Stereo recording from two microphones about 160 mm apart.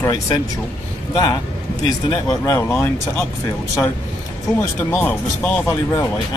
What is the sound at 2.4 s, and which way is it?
Speech, 15° left (ahead or behind).